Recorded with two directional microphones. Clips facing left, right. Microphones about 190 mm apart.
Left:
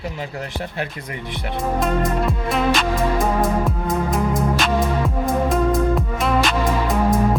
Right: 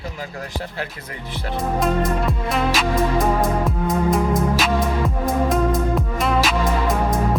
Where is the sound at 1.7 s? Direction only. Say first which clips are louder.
Right 1 dB; centre (ahead or behind).